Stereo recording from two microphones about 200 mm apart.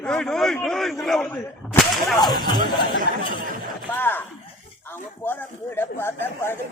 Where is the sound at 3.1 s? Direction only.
60° left (ahead or behind).